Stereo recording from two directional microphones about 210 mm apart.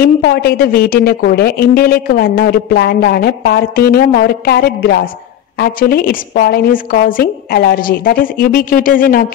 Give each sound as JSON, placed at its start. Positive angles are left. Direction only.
{"t": 0.0, "sound": "speech", "side_deg": 45}